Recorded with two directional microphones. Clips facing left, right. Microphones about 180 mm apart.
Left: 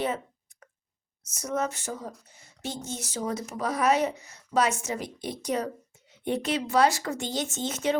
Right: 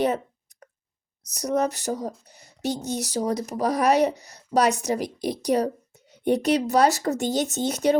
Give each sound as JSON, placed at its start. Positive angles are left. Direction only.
{"t": 1.2, "sound": "speech", "side_deg": -40}